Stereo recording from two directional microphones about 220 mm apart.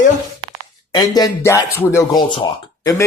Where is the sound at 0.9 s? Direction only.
15° left (ahead or behind).